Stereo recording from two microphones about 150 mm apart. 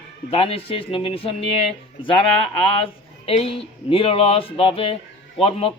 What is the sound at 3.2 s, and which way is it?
Speech, 40° left (ahead or behind).